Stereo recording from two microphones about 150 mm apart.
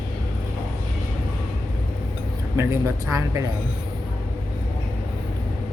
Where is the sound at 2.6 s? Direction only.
15° right (ahead or behind).